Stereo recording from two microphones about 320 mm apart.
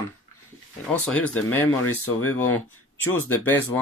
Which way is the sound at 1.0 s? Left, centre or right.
Centre.